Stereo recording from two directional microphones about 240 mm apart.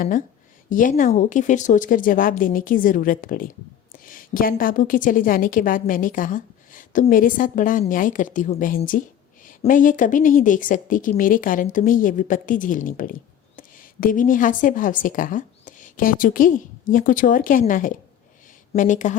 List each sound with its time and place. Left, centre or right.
0.7 s a woman's voice: left